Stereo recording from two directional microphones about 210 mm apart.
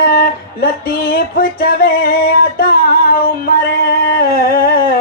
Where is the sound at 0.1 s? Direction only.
45° left (ahead or behind).